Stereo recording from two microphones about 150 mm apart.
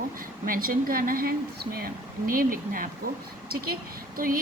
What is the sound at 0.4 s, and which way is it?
A woman's voice, 70° right (ahead or behind).